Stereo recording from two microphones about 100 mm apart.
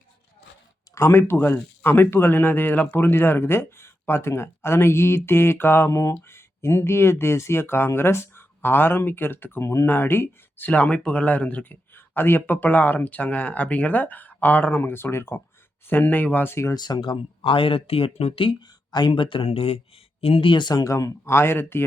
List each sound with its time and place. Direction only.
0.9 s speech: 25° left (ahead or behind)
16.7 s speech: 45° left (ahead or behind); by 18.5 s 65° left (ahead or behind)
18.9 s speech: 50° left (ahead or behind); by 21.8 s 25° left (ahead or behind)